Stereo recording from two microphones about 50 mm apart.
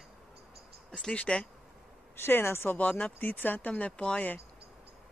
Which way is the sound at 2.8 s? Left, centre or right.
Left.